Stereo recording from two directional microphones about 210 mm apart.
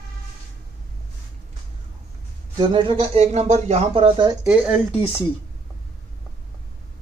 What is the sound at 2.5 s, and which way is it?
Speech, 20° right (ahead or behind).